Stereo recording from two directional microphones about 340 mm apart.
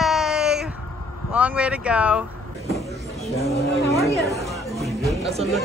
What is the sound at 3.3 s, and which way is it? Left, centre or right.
Speech, centre.